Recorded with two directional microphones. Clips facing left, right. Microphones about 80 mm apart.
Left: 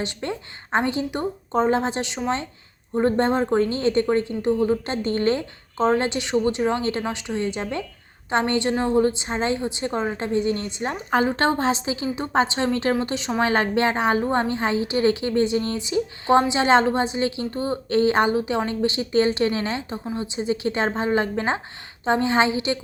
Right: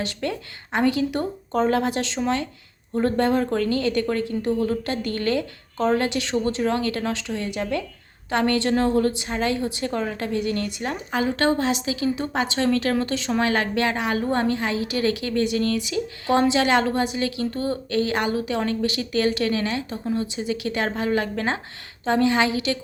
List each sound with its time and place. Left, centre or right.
0.0 s a woman's voice: left